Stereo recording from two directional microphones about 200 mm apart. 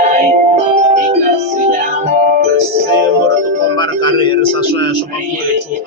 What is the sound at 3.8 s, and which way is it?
Music, 25° left (ahead or behind).